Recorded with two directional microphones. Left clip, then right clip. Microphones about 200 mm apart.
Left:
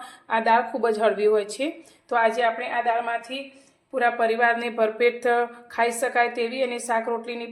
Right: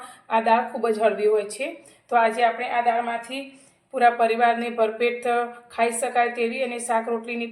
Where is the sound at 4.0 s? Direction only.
35° left (ahead or behind).